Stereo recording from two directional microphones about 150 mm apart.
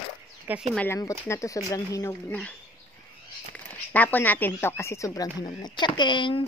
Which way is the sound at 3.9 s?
10° left (ahead or behind).